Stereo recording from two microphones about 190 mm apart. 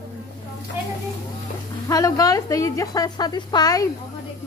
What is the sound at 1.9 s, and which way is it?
Speech, 20° left (ahead or behind).